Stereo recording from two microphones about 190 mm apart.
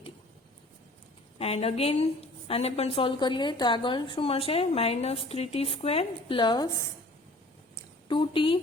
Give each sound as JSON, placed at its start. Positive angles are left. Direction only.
{"t": 1.4, "sound": "a woman's voice", "side_deg": 30}
{"t": 8.0, "sound": "speech", "side_deg": 25}